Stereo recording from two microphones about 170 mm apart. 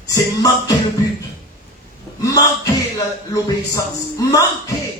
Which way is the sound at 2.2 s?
20° left (ahead or behind).